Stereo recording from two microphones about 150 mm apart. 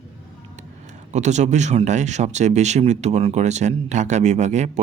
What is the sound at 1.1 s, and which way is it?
Speech, 50° right (ahead or behind).